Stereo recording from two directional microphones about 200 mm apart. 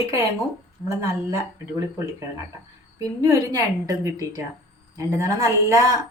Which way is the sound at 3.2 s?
15° right (ahead or behind).